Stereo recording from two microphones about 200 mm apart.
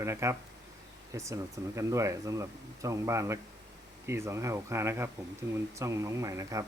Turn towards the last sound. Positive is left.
turn(degrees=-15)  # may be behind; listen again after turning